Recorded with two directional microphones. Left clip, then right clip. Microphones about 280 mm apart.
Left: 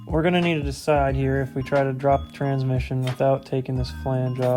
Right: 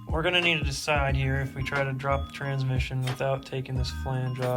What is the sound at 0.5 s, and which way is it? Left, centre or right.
Speech, left.